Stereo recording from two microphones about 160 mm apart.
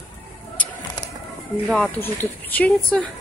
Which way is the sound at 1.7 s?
10° left (ahead or behind).